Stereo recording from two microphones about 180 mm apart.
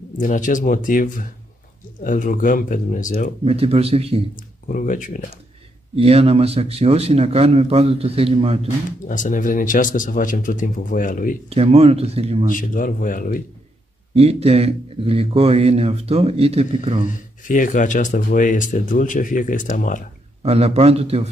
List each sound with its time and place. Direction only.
0.2 s speech: 45° left (ahead or behind)
3.4 s a man's voice: 35° right (ahead or behind)
4.6 s speech: 45° left (ahead or behind)
5.9 s a man's voice: 35° right (ahead or behind)
9.0 s speech: 45° left (ahead or behind)
11.4 s a man's voice: 35° right (ahead or behind)
12.4 s speech: 50° left (ahead or behind)
14.1 s a man's voice: 35° right (ahead or behind)
17.5 s speech: 45° left (ahead or behind)
20.4 s a man's voice: 35° right (ahead or behind)